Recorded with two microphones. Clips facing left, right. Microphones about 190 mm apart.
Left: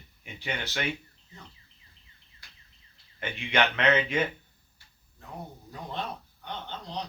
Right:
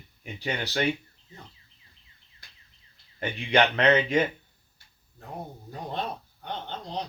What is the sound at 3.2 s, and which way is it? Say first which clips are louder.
Speech: right 4 dB; 35° right (ahead or behind).